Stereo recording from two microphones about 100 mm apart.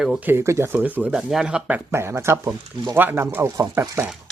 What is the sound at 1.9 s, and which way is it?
Speech, 25° right (ahead or behind).